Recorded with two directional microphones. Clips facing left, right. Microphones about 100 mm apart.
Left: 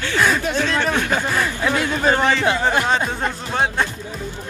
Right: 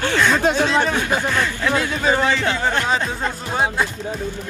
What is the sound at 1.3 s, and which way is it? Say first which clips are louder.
Speech: even; 10° left (ahead or behind).